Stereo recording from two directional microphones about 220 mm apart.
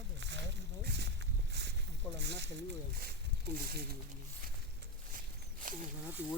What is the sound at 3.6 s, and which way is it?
Speech, 45° right (ahead or behind).